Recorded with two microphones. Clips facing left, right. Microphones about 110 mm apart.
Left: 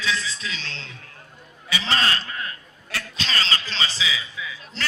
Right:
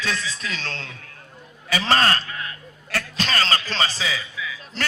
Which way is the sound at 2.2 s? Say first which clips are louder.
Even; 35° left (ahead or behind).